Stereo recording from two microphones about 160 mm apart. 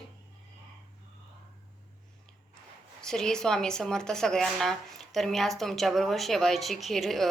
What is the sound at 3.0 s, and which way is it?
A woman's voice, 5° left (ahead or behind).